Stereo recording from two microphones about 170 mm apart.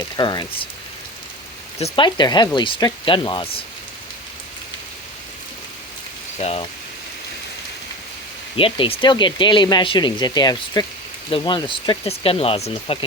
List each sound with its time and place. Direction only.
0.2 s speech: 25° left (ahead or behind)
1.8 s speech: 25° left (ahead or behind)
6.4 s speech: 35° left (ahead or behind)
8.5 s speech: 30° left (ahead or behind)